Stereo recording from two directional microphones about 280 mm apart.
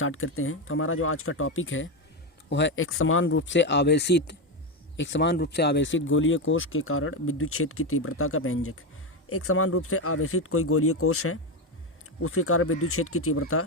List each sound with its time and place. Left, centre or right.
0.0 s speech: left